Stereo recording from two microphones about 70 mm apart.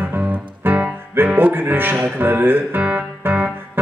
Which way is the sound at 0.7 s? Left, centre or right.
Right.